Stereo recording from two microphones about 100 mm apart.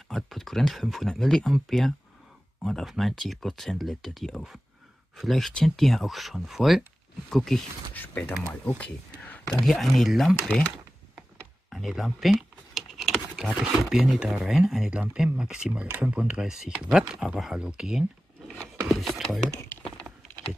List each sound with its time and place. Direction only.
0.1 s speech: centre (ahead or behind)
7.9 s speech: 20° left (ahead or behind)
8.6 s a sound: 15° left (ahead or behind)
9.6 s speech: centre (ahead or behind)
11.7 s speech: centre (ahead or behind)